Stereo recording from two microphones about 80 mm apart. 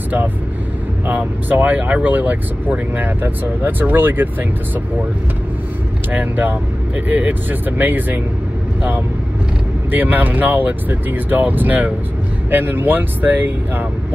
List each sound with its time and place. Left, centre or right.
1.0 s speech: right
6.1 s speech: right
9.8 s speech: right